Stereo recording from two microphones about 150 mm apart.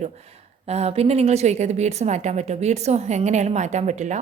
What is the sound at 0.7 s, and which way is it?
A woman's voice, 45° right (ahead or behind).